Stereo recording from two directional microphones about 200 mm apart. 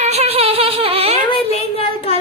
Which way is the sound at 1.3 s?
30° left (ahead or behind).